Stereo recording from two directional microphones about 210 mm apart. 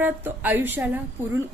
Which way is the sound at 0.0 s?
10° right (ahead or behind).